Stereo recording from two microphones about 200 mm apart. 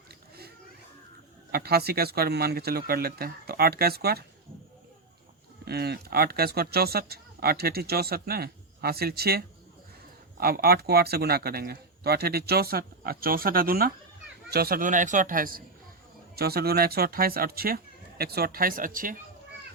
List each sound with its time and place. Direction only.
1.5 s speech: 50° right (ahead or behind)
5.6 s speech: 55° right (ahead or behind)
10.4 s speech: 50° right (ahead or behind)